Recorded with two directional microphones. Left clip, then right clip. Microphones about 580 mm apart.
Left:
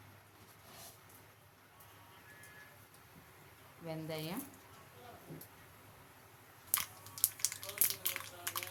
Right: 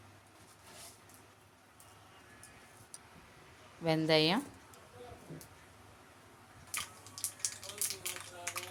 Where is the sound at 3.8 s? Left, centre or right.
Centre.